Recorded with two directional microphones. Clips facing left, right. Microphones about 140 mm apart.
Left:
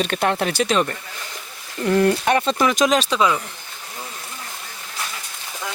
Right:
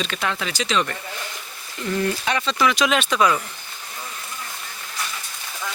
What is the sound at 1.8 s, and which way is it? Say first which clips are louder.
Speech: left 6 dB; 60° left (ahead or behind).